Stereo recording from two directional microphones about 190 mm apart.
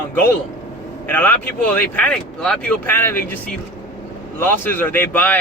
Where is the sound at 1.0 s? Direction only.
10° left (ahead or behind).